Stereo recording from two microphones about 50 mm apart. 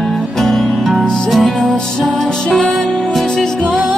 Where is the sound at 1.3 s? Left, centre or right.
Centre.